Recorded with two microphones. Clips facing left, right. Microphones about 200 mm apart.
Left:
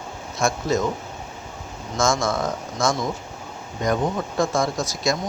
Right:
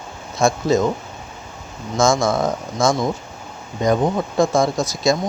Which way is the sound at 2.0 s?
30° right (ahead or behind).